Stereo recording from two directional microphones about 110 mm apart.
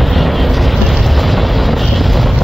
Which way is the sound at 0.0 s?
Centre (ahead or behind).